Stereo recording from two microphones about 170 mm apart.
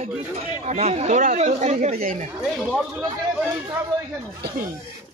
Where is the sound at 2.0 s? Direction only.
55° right (ahead or behind).